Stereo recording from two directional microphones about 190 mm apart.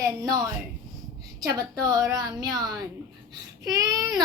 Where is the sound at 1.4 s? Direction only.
20° right (ahead or behind).